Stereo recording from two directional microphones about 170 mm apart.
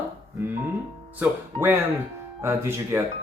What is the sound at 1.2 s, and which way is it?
Speech, 15° right (ahead or behind).